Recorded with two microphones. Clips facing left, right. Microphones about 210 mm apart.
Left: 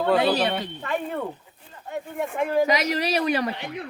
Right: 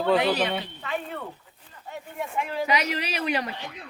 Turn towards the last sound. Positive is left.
turn(degrees=40)  # may be behind; listen again after turning